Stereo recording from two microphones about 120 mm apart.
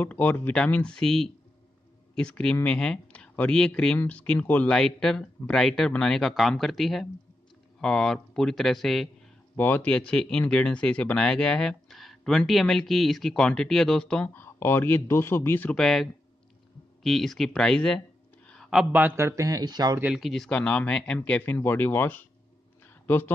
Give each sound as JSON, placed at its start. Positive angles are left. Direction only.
{"t": 0.0, "sound": "speech", "side_deg": 15}
{"t": 9.6, "sound": "speech", "side_deg": 15}
{"t": 15.8, "sound": "speech", "side_deg": 5}
{"t": 18.5, "sound": "a sound", "side_deg": 0}
{"t": 18.9, "sound": "a man's voice", "side_deg": -15}
{"t": 20.2, "sound": "speech", "side_deg": 0}